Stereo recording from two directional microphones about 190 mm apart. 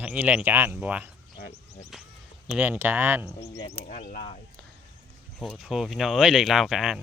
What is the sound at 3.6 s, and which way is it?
Speech, 35° left (ahead or behind).